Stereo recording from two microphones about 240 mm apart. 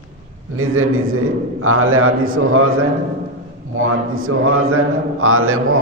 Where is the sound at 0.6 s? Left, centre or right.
Right.